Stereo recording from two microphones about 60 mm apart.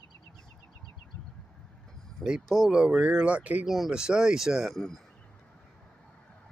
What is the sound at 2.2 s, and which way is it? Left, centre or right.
Speech, centre.